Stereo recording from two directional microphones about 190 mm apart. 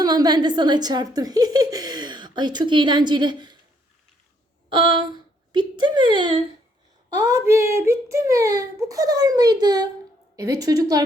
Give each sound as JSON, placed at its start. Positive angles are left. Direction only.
{"t": 0.0, "sound": "speech", "side_deg": -20}
{"t": 4.7, "sound": "a child's voice", "side_deg": -25}